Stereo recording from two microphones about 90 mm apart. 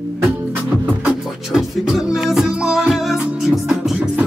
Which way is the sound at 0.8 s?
10° right (ahead or behind).